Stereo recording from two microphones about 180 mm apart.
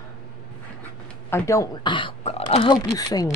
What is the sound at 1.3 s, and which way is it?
Speech, 15° left (ahead or behind).